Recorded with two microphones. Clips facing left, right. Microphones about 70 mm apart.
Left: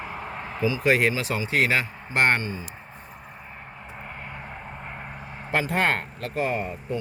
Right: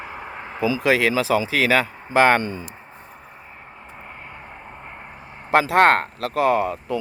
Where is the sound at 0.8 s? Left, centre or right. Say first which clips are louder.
Right 2 dB; right.